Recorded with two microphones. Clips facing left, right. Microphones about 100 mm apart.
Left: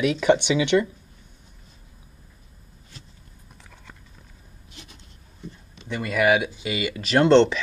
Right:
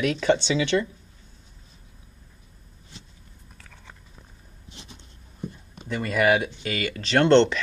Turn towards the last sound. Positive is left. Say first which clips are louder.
# left 1 dB
turn(degrees=5)  # may be behind; listen again after turning